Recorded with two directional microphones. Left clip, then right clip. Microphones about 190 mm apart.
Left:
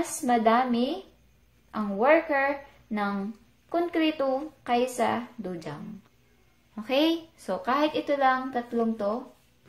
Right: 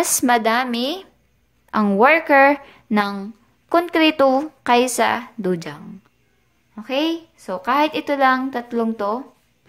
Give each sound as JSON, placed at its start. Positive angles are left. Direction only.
{"t": 0.3, "sound": "a woman's voice", "side_deg": -45}
{"t": 6.7, "sound": "a woman's voice", "side_deg": -15}